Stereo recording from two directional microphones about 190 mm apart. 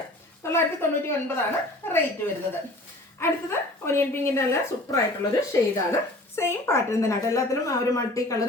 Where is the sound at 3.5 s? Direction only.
15° left (ahead or behind).